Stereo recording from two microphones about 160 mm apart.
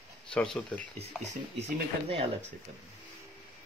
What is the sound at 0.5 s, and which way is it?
Speech, 10° left (ahead or behind).